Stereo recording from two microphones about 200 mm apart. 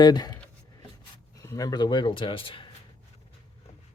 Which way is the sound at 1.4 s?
15° left (ahead or behind).